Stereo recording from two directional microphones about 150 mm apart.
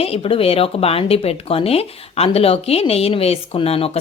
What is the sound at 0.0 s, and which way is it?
Speech, 40° left (ahead or behind).